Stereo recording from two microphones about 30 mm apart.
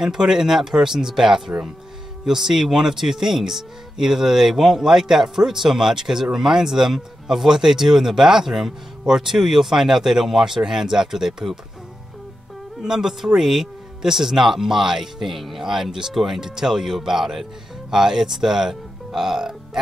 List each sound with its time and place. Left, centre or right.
0.0 s speech: centre
12.8 s speech: centre
15.6 s speech: centre
16.1 s speech: centre
16.3 s speech: centre